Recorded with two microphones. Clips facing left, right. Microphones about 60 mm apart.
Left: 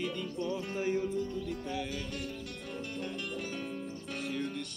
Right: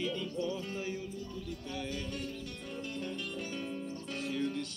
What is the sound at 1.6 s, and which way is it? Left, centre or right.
Speech, centre.